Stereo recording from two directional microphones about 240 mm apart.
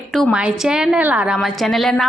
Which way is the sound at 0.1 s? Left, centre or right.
Centre.